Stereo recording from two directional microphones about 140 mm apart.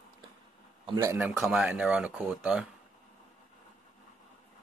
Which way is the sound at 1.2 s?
5° right (ahead or behind).